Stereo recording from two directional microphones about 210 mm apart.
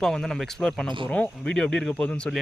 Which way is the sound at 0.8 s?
25° right (ahead or behind).